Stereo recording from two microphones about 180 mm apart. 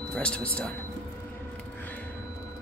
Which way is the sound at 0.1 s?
5° left (ahead or behind).